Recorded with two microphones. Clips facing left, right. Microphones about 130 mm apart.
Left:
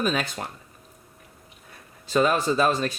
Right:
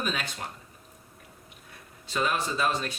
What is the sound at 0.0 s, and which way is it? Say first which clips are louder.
Speech: left 7 dB; 50° left (ahead or behind).